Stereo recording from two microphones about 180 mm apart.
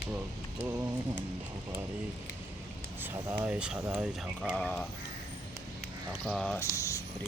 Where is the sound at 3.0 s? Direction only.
10° right (ahead or behind).